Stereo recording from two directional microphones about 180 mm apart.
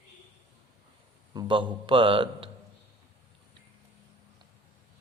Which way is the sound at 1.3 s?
25° right (ahead or behind).